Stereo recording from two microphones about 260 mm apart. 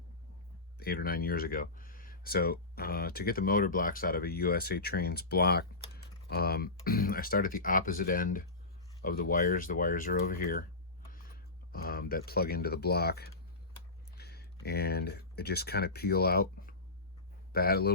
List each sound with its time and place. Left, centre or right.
0.8 s speech: left
11.7 s speech: left